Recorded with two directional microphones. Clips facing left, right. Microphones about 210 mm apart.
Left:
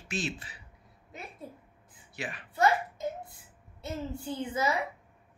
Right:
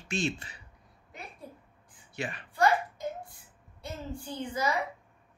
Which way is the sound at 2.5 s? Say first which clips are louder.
Even; 25° left (ahead or behind).